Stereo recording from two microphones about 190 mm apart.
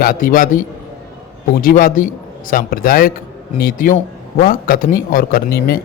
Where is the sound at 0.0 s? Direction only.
45° left (ahead or behind).